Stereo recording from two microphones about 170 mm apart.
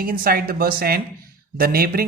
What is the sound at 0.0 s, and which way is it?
Speech, 60° right (ahead or behind).